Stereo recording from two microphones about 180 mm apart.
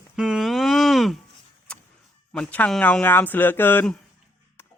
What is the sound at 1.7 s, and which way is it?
Vehicle, 5° left (ahead or behind).